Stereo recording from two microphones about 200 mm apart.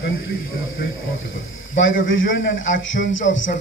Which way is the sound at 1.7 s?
75° left (ahead or behind).